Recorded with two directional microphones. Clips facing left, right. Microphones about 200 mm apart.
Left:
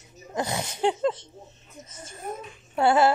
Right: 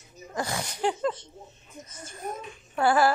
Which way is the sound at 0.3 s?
20° left (ahead or behind).